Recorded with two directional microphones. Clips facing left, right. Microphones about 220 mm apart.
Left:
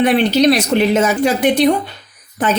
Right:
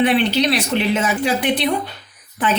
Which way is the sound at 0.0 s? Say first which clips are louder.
Left 4 dB; 40° left (ahead or behind).